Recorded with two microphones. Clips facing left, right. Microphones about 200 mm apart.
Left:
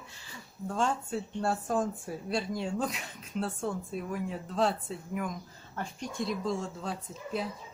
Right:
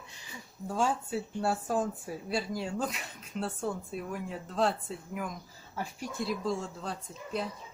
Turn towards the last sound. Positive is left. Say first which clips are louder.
# left 1 dB
turn(degrees=0)  # may be behind; listen again after turning